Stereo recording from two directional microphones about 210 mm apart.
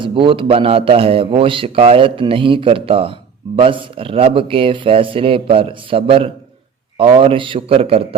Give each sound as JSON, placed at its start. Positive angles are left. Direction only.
{"t": 0.0, "sound": "a man's voice", "side_deg": -25}